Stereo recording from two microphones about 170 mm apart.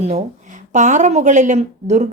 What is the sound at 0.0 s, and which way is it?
Speech, 40° right (ahead or behind).